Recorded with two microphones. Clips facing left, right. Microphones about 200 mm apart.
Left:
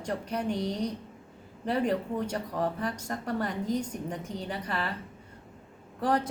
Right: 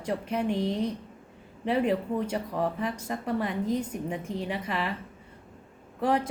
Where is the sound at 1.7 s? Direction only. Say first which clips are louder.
Right 2 dB; 5° right (ahead or behind).